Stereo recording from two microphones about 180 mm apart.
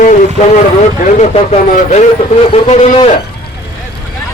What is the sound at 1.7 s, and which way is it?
Speech, 40° left (ahead or behind).